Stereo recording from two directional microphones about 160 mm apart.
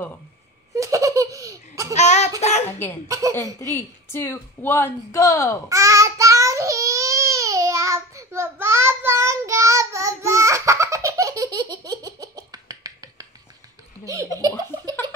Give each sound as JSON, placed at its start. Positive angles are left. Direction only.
{"t": 0.7, "sound": "laughter", "side_deg": -20}
{"t": 2.0, "sound": "a sound", "side_deg": 45}
{"t": 3.1, "sound": "speech", "side_deg": -20}
{"t": 3.7, "sound": "speech", "side_deg": 15}
{"t": 5.7, "sound": "child singing", "side_deg": -20}
{"t": 14.0, "sound": "speech", "side_deg": -20}